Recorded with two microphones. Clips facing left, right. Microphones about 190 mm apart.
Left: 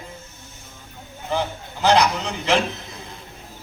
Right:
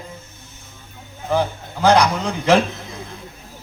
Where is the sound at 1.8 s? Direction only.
55° right (ahead or behind).